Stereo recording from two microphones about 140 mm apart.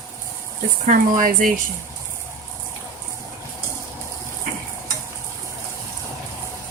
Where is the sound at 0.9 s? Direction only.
70° right (ahead or behind).